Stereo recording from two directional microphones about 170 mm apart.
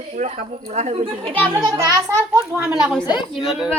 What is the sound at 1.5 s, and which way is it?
Speech, 20° right (ahead or behind).